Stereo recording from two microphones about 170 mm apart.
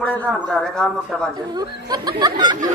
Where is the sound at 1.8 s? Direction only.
25° right (ahead or behind).